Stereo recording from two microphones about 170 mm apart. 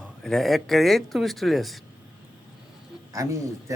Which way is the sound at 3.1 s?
20° right (ahead or behind).